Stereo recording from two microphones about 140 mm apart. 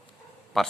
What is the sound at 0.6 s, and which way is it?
Speech, centre (ahead or behind).